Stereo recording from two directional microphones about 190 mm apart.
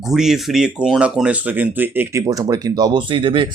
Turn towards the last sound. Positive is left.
turn(degrees=-25)  # may be behind; listen again after turning